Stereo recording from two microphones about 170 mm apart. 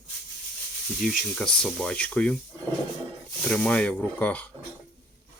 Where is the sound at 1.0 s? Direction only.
Centre (ahead or behind).